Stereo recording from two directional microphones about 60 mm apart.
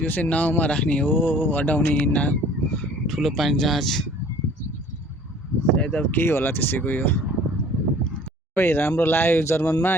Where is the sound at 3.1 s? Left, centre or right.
Centre.